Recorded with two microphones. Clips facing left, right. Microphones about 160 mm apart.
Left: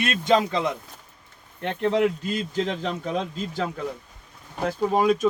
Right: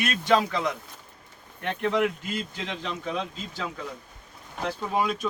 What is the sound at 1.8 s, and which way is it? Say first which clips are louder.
Speech: left 4 dB; 35° left (ahead or behind).